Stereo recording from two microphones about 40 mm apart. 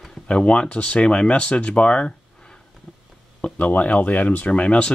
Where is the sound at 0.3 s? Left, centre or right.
Left.